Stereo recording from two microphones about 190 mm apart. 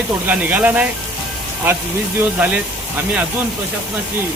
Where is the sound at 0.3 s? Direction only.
10° right (ahead or behind).